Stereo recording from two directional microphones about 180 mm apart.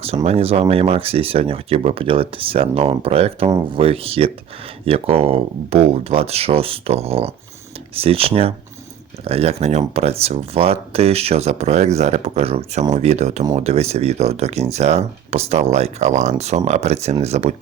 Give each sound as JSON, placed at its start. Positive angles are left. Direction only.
{"t": 0.3, "sound": "speech", "side_deg": -35}